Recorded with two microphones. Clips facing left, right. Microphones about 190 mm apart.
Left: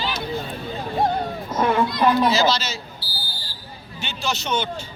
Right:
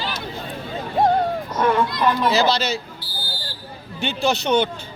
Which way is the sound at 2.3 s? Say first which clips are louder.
Right 2 dB; 60° right (ahead or behind).